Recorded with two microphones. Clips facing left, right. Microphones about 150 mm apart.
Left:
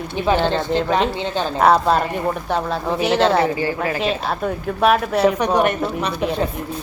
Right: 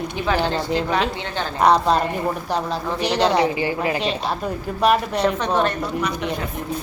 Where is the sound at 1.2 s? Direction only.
15° left (ahead or behind).